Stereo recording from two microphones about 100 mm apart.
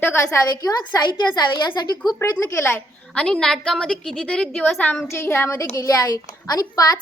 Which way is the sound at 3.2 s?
5° left (ahead or behind).